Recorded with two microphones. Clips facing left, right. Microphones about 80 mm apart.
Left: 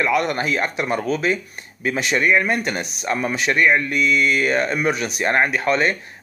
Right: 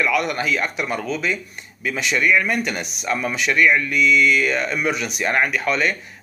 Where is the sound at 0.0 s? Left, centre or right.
Left.